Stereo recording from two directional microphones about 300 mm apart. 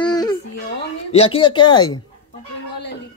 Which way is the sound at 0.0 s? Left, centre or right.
Centre.